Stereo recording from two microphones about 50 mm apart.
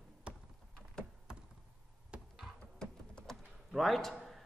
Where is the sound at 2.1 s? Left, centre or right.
Right.